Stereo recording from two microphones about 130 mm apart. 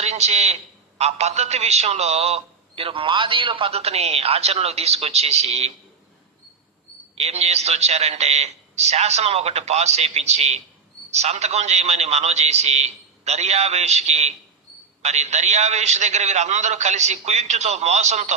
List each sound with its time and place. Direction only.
0.0 s a man's voice: 55° right (ahead or behind)
7.2 s a man's voice: 55° right (ahead or behind)